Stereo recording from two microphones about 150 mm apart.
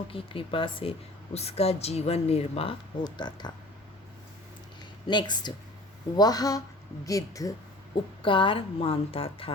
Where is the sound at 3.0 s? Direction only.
30° left (ahead or behind).